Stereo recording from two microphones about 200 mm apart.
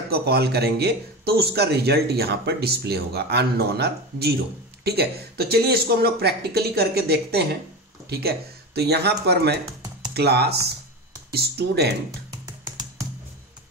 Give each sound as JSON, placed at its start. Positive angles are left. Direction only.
{"t": 0.1, "sound": "a man's voice", "side_deg": -55}
{"t": 12.3, "sound": "music", "side_deg": -15}